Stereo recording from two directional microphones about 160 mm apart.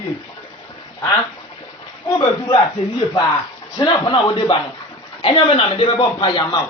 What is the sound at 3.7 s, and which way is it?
A man's voice, 30° left (ahead or behind).